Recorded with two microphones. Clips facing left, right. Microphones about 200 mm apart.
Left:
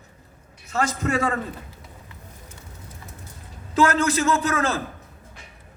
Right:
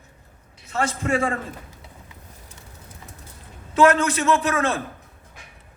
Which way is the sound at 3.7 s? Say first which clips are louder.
Right 2 dB; 35° left (ahead or behind).